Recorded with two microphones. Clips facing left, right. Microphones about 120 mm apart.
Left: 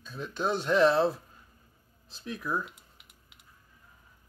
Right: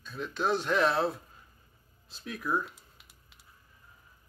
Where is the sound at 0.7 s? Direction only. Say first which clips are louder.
Left 7 dB; 30° left (ahead or behind).